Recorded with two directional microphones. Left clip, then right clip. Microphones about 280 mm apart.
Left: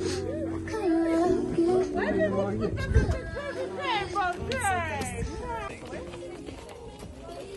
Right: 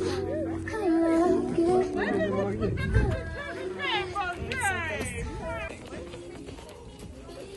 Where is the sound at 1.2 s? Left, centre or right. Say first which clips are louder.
Right 1 dB; right.